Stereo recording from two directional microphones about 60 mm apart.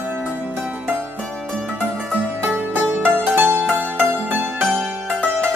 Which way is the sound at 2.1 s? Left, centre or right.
Centre.